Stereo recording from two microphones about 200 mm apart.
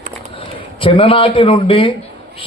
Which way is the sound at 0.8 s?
25° left (ahead or behind).